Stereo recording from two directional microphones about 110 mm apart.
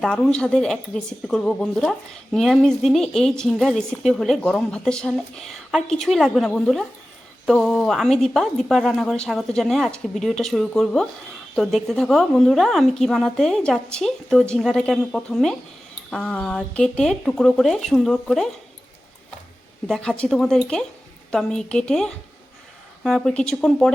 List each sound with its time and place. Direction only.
0.0 s a woman's voice: 5° left (ahead or behind)
19.9 s a woman's voice: 10° left (ahead or behind)